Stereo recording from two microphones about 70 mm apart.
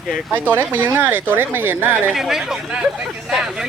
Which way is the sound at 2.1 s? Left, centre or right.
Centre.